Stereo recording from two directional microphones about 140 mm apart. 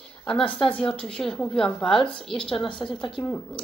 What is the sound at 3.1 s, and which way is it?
Speech, 5° left (ahead or behind).